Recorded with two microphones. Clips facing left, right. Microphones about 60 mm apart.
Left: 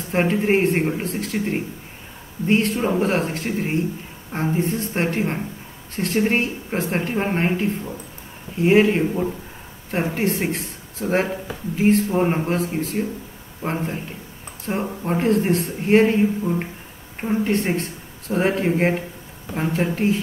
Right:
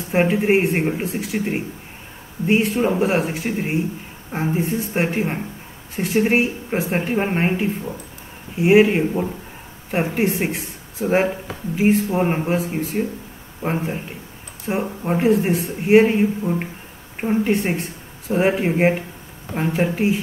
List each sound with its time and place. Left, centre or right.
0.1 s a man's voice: centre